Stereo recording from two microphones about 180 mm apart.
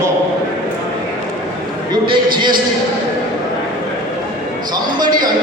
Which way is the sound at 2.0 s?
25° right (ahead or behind).